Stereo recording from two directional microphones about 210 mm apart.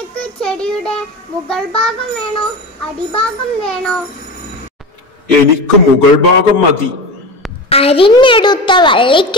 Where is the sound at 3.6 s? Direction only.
5° left (ahead or behind).